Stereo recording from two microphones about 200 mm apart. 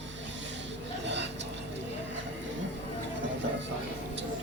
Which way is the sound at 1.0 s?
60° right (ahead or behind).